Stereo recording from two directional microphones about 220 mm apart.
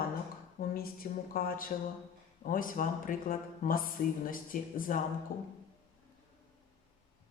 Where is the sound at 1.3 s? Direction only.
40° left (ahead or behind).